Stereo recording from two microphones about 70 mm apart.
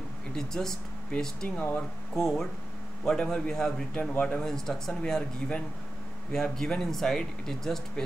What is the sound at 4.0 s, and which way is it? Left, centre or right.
Speech, centre.